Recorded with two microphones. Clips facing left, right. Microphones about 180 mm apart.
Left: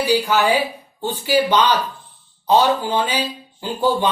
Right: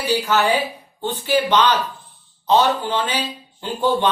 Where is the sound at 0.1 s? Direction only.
10° left (ahead or behind).